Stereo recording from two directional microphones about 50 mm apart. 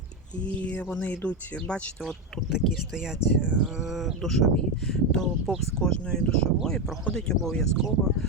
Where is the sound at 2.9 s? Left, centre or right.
Centre.